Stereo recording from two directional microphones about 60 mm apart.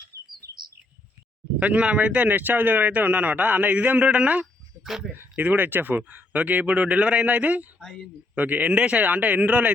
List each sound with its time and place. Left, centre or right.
0.1 s chirp: right
1.5 s a man's voice: right
4.8 s speech: centre
5.4 s a man's voice: right